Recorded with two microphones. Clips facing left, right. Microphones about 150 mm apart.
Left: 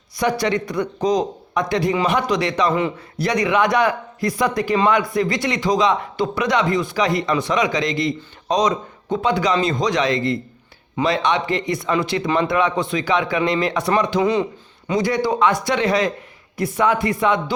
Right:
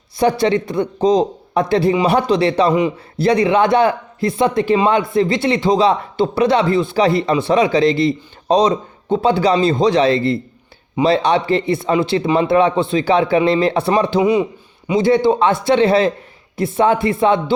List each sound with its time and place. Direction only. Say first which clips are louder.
0.2 s a man's voice: right 5 dB; 30° right (ahead or behind)